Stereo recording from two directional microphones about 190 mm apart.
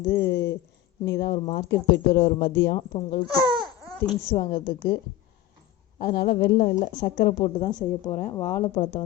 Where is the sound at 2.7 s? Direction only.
25° left (ahead or behind).